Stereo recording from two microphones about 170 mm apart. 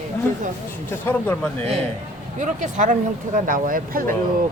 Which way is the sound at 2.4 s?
45° right (ahead or behind).